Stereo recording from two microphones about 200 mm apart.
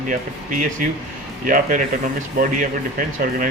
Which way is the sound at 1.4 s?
40° right (ahead or behind).